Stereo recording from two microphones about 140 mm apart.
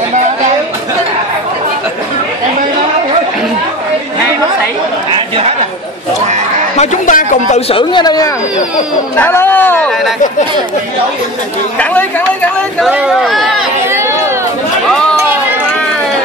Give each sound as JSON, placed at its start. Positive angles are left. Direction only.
{"t": 6.8, "sound": "speech", "side_deg": 65}
{"t": 7.7, "sound": "speech", "side_deg": 30}
{"t": 9.1, "sound": "speech", "side_deg": 15}
{"t": 11.8, "sound": "speech", "side_deg": 10}
{"t": 12.9, "sound": "speech", "side_deg": -5}